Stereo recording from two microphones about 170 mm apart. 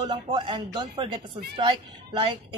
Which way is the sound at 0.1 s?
30° right (ahead or behind).